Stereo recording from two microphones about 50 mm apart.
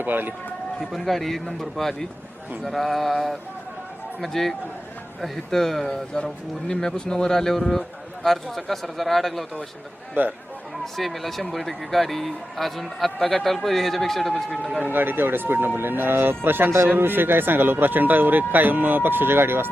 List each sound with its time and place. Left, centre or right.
0.0 s speech: right
0.8 s a man's voice: centre
10.2 s speech: right
10.9 s speech: centre
14.8 s speech: right